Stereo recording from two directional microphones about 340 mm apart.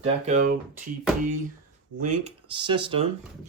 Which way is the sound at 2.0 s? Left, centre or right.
Centre.